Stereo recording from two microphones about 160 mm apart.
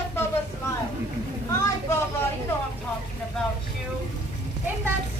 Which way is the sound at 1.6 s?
20° left (ahead or behind).